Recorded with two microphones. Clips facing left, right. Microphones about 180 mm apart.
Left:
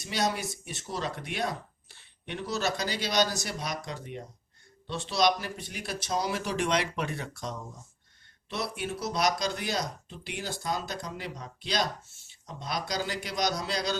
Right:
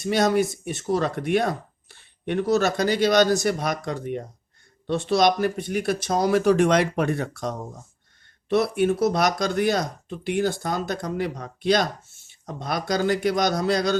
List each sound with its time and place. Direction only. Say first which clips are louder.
0.0 s speech: right 10 dB; 50° right (ahead or behind)